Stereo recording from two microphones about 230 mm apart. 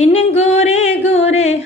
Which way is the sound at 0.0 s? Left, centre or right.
Left.